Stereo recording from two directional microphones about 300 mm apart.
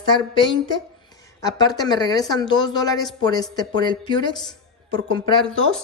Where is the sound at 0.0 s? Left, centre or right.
Centre.